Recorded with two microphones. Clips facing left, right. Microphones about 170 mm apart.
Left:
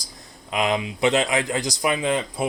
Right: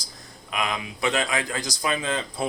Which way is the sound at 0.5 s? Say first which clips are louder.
Left 6 dB; 25° left (ahead or behind).